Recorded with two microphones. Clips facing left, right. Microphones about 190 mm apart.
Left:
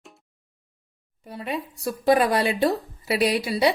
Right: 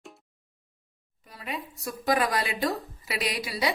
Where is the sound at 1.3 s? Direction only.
30° left (ahead or behind).